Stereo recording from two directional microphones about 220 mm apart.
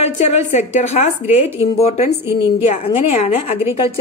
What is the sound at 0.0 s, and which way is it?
A woman's voice, 30° left (ahead or behind).